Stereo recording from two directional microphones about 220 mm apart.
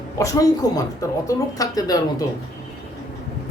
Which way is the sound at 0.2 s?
15° left (ahead or behind).